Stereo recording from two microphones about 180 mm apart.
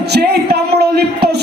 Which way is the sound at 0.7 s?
65° right (ahead or behind).